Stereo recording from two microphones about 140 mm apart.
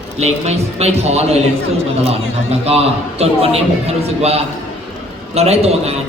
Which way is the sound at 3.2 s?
45° right (ahead or behind).